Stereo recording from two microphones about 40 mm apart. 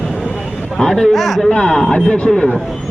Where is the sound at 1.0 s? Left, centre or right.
Centre.